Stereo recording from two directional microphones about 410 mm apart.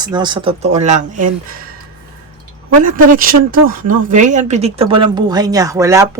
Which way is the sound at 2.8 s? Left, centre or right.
Centre.